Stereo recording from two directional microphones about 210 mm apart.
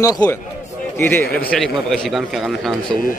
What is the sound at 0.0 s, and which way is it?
A man's voice, 15° left (ahead or behind).